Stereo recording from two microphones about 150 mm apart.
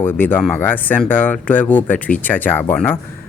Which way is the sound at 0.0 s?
15° left (ahead or behind).